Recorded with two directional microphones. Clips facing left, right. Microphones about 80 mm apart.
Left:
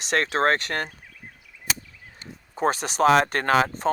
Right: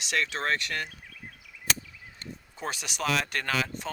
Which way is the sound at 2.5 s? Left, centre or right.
Left.